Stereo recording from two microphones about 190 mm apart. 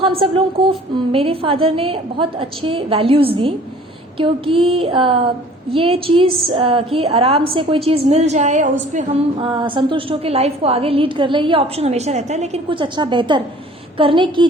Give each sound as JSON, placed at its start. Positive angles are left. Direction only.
{"t": 0.0, "sound": "a woman's voice", "side_deg": -30}
{"t": 9.5, "sound": "a woman's voice", "side_deg": -25}